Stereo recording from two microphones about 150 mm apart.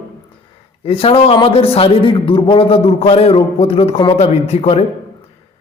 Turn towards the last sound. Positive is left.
turn(degrees=45)  # may be behind; listen again after turning